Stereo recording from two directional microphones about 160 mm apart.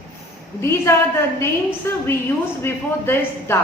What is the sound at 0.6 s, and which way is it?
Speech, 15° left (ahead or behind).